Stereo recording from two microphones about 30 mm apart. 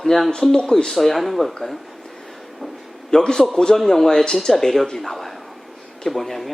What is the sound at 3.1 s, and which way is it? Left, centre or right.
Speech, left.